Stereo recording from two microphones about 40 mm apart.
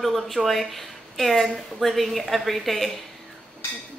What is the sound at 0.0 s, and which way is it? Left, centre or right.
A woman's voice, centre.